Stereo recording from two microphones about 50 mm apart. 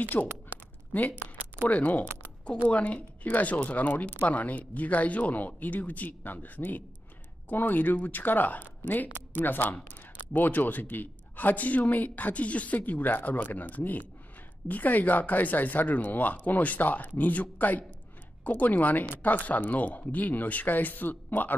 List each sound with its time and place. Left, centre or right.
0.1 s speech: left
0.9 s speech: left